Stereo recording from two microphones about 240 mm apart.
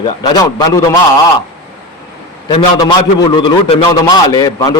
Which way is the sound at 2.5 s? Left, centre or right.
Centre.